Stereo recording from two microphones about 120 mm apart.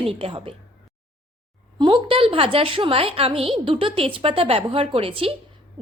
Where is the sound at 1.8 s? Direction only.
45° right (ahead or behind).